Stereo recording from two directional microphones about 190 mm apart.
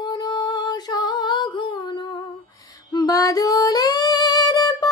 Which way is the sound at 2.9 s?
20° left (ahead or behind).